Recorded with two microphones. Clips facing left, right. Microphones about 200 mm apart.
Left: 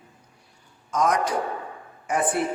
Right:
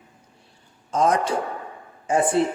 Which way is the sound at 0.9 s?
30° right (ahead or behind).